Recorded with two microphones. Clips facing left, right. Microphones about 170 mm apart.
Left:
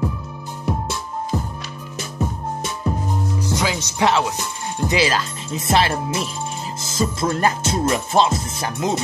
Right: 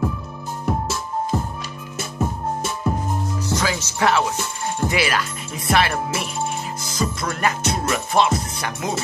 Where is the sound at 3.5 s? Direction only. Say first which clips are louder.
Right 1 dB; 15° left (ahead or behind).